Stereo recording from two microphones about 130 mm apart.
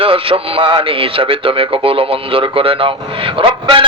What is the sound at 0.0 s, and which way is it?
Speech, 45° right (ahead or behind).